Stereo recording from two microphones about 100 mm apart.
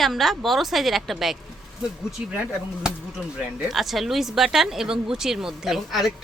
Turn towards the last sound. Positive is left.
turn(degrees=0)  # may be behind; listen again after turning